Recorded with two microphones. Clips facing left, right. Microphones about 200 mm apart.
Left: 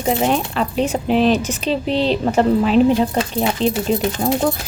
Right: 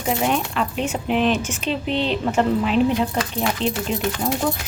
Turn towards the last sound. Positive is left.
turn(degrees=35)  # may be behind; listen again after turning